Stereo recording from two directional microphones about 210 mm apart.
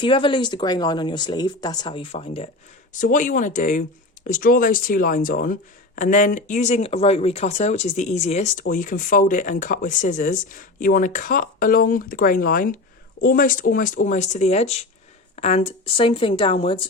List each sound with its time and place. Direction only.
0.0 s speech: 25° left (ahead or behind)
3.0 s speech: 40° left (ahead or behind)